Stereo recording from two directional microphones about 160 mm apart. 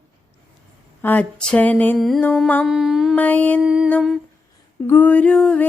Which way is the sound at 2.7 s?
5° right (ahead or behind).